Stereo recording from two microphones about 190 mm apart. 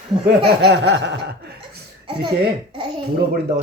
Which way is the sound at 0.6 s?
65° right (ahead or behind).